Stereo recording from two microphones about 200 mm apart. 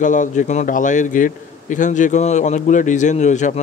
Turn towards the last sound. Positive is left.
turn(degrees=35)  # may be behind; listen again after turning